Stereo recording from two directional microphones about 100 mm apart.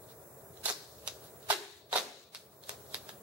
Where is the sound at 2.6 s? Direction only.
10° right (ahead or behind).